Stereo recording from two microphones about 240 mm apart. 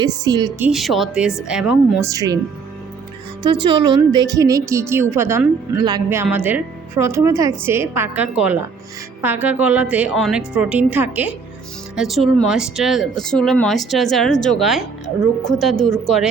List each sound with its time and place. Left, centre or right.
0.0 s a woman's voice: centre
0.7 s a woman's voice: centre
3.4 s a woman's voice: centre
15.4 s a woman's voice: centre
15.9 s speech: centre